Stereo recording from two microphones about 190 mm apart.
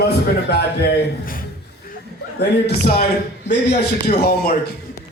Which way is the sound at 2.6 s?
60° left (ahead or behind).